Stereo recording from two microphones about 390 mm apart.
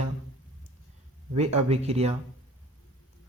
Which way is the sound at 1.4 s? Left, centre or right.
Centre.